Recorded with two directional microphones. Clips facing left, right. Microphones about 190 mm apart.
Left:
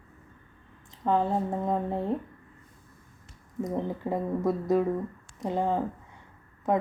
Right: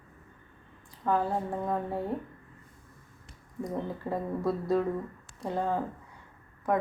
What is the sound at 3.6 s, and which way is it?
A woman's voice, 20° left (ahead or behind).